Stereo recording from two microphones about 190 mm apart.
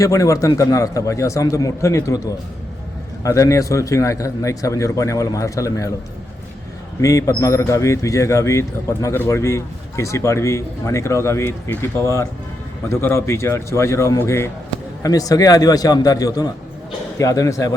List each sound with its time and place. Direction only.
0.0 s a man's voice: 15° left (ahead or behind)
7.0 s a man's voice: 15° left (ahead or behind)